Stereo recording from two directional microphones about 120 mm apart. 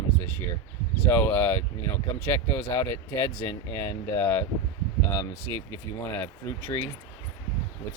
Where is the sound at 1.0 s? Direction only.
20° left (ahead or behind).